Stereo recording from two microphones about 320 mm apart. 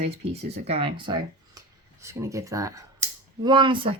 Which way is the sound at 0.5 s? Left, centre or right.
Centre.